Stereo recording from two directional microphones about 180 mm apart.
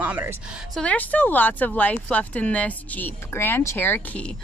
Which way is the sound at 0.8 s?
10° left (ahead or behind).